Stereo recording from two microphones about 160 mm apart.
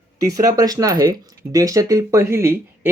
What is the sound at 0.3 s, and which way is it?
Speech, 20° right (ahead or behind).